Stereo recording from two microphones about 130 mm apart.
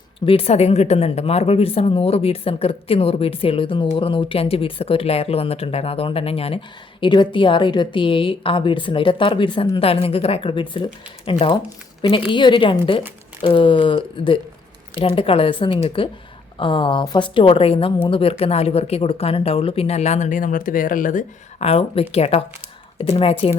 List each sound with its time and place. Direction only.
0.3 s a woman's voice: 50° left (ahead or behind)
7.0 s a woman's voice: 35° left (ahead or behind); by 21.2 s 85° left
21.6 s a woman's voice: 50° left (ahead or behind)